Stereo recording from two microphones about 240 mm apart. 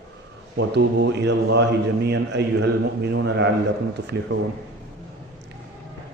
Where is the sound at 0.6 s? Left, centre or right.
Right.